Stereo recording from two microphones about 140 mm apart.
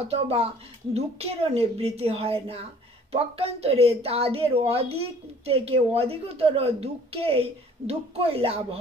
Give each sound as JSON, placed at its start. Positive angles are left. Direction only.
{"t": 0.0, "sound": "a woman's voice", "side_deg": -45}